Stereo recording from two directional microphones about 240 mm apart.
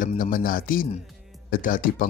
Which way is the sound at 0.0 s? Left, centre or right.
Left.